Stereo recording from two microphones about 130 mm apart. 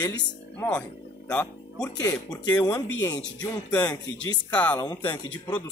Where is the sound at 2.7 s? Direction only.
25° left (ahead or behind).